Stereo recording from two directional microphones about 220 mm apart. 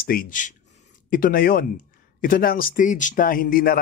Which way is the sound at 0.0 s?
40° left (ahead or behind).